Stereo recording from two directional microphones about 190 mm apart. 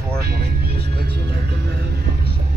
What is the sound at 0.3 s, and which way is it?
Music, 55° right (ahead or behind).